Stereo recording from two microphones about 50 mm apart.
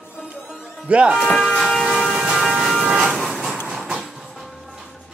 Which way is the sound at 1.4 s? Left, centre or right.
Centre.